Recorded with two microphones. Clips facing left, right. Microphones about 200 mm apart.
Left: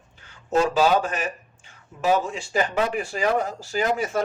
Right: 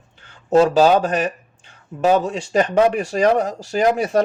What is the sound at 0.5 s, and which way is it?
Speech, 40° right (ahead or behind).